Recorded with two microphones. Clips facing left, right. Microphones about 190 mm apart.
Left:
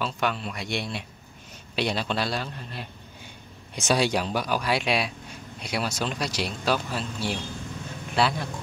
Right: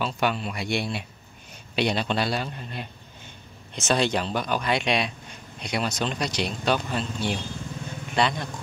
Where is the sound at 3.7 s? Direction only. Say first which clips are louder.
Even; 10° left (ahead or behind).